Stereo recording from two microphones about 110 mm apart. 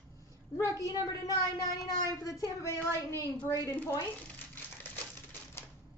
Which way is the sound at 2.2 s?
30° left (ahead or behind).